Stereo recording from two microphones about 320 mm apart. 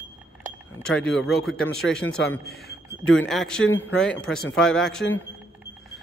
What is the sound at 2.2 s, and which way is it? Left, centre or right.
Speech, left.